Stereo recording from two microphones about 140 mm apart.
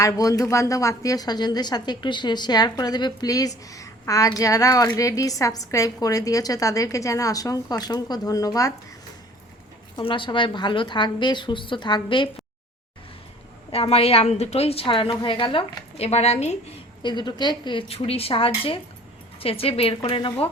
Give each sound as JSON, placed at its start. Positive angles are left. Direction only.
{"t": 0.0, "sound": "a woman's voice", "side_deg": 25}
{"t": 9.9, "sound": "a woman's voice", "side_deg": 35}
{"t": 13.7, "sound": "a woman's voice", "side_deg": 45}
{"t": 17.0, "sound": "a woman's voice", "side_deg": 35}